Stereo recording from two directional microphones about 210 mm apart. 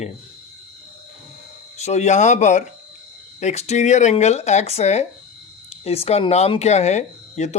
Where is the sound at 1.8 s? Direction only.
30° left (ahead or behind).